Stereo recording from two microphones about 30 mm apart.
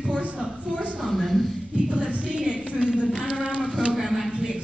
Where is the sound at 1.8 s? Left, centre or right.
Right.